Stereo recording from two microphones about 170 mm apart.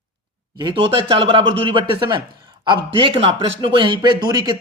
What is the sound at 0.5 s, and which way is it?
Speech, 25° right (ahead or behind).